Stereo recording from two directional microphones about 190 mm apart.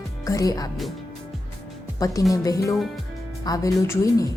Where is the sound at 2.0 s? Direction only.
15° left (ahead or behind).